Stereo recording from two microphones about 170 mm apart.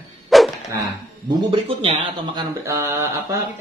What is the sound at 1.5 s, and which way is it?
Speech, 30° right (ahead or behind).